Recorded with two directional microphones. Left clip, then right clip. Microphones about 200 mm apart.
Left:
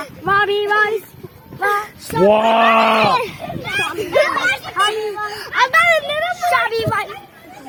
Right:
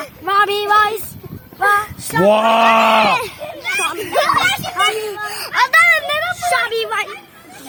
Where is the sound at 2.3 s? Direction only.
55° right (ahead or behind).